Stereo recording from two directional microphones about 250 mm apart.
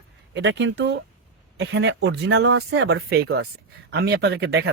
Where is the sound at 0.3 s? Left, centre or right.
Right.